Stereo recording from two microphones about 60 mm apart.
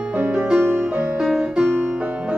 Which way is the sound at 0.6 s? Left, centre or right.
Right.